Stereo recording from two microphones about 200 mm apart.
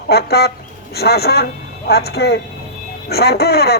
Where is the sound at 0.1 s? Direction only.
50° left (ahead or behind).